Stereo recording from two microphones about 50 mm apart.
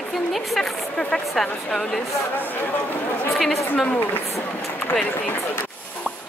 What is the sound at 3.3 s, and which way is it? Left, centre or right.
Speech, centre.